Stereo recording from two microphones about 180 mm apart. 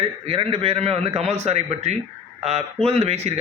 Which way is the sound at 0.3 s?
30° right (ahead or behind).